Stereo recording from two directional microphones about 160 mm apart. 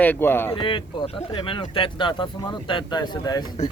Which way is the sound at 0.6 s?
30° left (ahead or behind).